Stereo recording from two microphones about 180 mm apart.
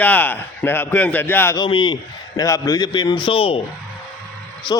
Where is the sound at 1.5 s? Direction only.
25° left (ahead or behind).